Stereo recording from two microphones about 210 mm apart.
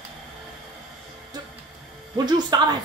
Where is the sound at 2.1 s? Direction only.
20° right (ahead or behind).